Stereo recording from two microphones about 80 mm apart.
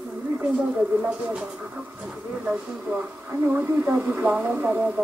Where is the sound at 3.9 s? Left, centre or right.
Centre.